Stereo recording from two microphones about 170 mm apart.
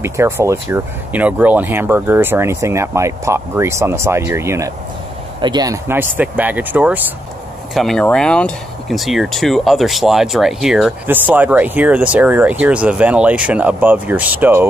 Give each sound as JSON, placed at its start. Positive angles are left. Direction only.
{"t": 0.0, "sound": "speech", "side_deg": -15}
{"t": 7.7, "sound": "speech", "side_deg": 0}